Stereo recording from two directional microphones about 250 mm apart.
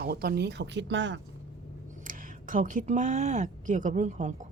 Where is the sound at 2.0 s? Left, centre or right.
Right.